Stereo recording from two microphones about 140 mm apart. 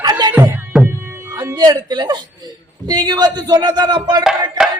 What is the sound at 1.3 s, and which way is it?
Speech, 30° right (ahead or behind).